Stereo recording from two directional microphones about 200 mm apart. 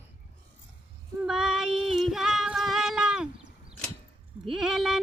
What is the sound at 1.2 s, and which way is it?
Female singing, centre (ahead or behind).